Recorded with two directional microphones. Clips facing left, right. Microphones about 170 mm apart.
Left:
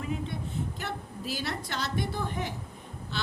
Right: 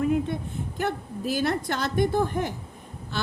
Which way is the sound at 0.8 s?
50° right (ahead or behind).